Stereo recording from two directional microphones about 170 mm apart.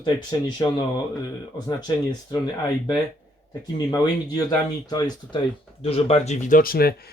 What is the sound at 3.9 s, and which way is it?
Speech, 25° left (ahead or behind).